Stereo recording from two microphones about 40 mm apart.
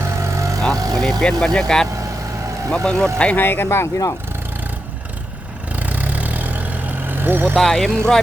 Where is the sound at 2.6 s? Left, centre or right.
Left.